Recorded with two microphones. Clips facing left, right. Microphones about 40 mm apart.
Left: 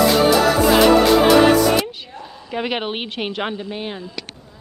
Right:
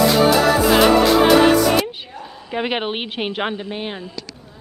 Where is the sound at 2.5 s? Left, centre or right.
Centre.